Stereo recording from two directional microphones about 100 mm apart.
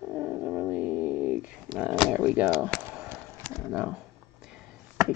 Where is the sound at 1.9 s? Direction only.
Centre (ahead or behind).